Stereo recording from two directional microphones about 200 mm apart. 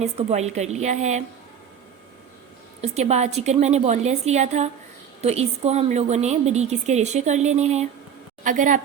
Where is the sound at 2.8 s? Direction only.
35° right (ahead or behind).